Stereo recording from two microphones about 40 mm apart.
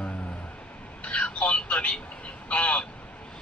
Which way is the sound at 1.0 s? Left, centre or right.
Left.